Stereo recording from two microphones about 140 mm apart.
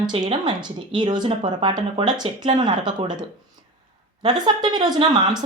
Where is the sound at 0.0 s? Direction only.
35° right (ahead or behind).